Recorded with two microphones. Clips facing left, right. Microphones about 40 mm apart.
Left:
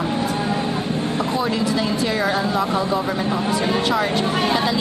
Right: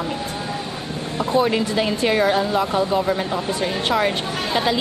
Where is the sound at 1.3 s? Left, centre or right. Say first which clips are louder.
Right 6 dB; right.